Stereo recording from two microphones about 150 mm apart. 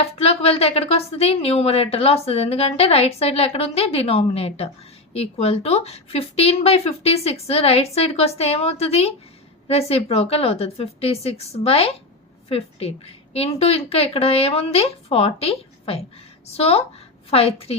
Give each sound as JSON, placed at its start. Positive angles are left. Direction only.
{"t": 0.0, "sound": "a woman's voice", "side_deg": 40}